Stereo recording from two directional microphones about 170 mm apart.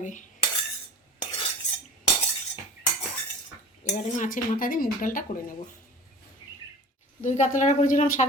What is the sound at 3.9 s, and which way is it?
Speech, 45° left (ahead or behind).